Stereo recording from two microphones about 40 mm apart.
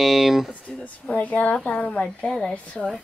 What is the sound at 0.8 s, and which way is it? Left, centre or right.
Speech, left.